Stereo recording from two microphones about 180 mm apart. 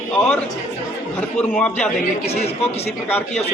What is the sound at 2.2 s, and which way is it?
Speech, 35° left (ahead or behind).